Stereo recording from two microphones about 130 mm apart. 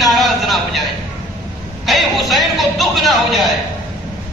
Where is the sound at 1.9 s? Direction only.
Centre (ahead or behind).